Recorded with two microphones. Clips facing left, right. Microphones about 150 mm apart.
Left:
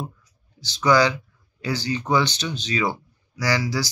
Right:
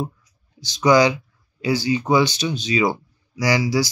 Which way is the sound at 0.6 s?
15° right (ahead or behind).